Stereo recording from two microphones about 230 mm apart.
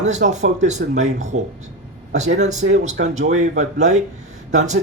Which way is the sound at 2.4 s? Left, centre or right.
Right.